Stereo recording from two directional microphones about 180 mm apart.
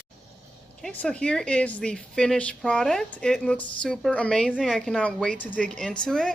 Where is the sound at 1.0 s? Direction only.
5° left (ahead or behind).